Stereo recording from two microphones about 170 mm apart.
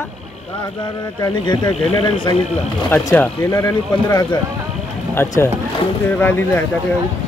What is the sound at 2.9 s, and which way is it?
Speech, 15° left (ahead or behind).